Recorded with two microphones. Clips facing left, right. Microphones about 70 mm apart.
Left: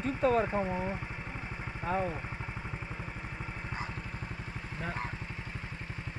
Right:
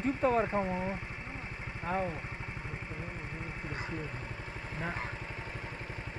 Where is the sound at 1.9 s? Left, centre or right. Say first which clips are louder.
Left 1 dB; centre.